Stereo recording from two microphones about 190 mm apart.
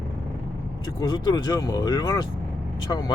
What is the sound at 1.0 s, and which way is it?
Speech, 20° left (ahead or behind).